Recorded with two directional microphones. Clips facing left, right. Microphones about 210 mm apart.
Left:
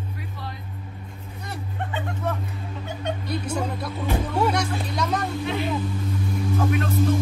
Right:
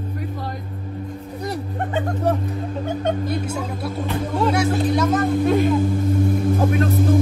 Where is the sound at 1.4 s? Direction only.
40° right (ahead or behind).